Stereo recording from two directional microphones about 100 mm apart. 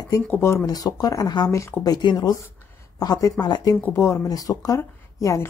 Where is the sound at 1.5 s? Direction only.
30° left (ahead or behind).